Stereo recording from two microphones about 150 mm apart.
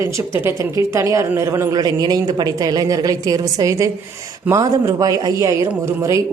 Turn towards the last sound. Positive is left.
turn(degrees=-20)  # may be behind; listen again after turning